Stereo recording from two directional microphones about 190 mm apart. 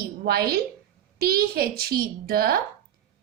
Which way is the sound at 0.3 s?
55° right (ahead or behind).